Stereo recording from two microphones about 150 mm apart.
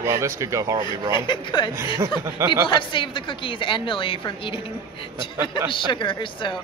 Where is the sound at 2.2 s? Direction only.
20° right (ahead or behind).